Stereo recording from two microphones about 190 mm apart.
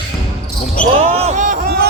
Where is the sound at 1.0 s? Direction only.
35° right (ahead or behind); by 1.9 s 50° right (ahead or behind).